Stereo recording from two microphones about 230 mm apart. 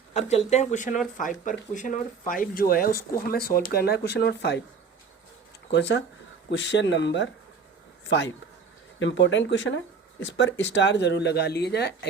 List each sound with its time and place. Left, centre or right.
0.1 s speech: left
6.5 s speech: left
9.0 s speech: left